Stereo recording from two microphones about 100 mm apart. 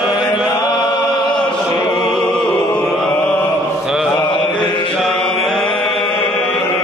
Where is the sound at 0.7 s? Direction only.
45° left (ahead or behind).